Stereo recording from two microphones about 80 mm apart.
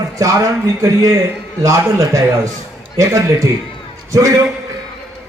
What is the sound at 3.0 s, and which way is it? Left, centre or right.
Mantra, right.